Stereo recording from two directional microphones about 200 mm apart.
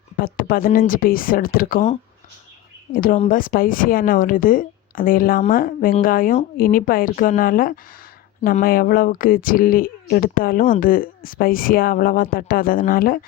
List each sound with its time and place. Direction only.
0.2 s speech: 45° left (ahead or behind)